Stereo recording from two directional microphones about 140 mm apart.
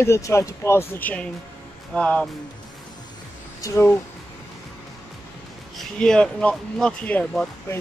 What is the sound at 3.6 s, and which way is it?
Speech, 20° left (ahead or behind).